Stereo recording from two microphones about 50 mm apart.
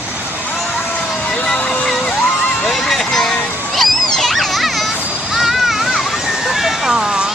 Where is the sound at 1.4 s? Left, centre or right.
Left.